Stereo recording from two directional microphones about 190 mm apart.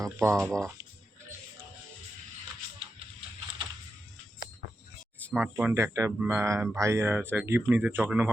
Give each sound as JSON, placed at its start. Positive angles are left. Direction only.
{"t": 0.0, "sound": "speech", "side_deg": -15}
{"t": 5.3, "sound": "speech", "side_deg": -5}